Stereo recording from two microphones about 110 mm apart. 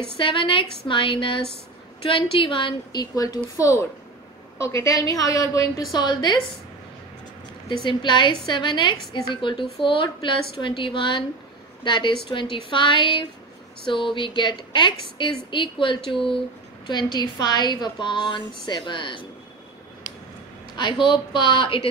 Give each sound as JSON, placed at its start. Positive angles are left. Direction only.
{"t": 0.2, "sound": "a woman's voice", "side_deg": 50}
{"t": 5.9, "sound": "a woman's voice", "side_deg": 45}
{"t": 7.6, "sound": "a woman's voice", "side_deg": 45}
{"t": 20.7, "sound": "a woman's voice", "side_deg": 45}